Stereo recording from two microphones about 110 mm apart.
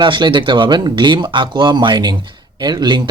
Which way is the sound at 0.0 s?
45° right (ahead or behind).